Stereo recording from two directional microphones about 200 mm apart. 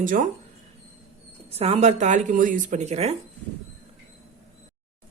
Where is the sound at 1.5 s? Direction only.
30° right (ahead or behind).